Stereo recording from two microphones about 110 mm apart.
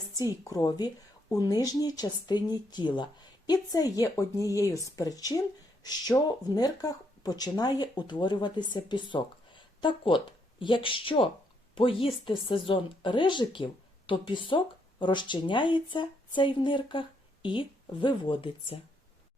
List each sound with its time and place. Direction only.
0.2 s speech: 30° left (ahead or behind); by 18.8 s 50° left (ahead or behind)